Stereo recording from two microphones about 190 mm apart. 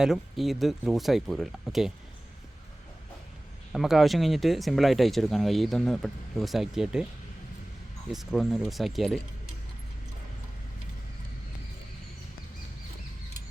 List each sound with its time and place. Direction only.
0.0 s speech: centre (ahead or behind)
3.7 s speech: centre (ahead or behind)
8.1 s speech: centre (ahead or behind)